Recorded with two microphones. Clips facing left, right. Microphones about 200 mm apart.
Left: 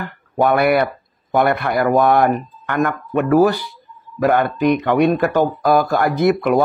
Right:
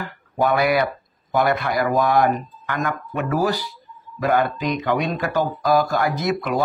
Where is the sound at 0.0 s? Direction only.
60° left (ahead or behind).